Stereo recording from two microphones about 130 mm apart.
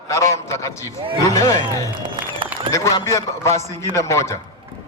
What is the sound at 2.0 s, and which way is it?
Music, 40° right (ahead or behind).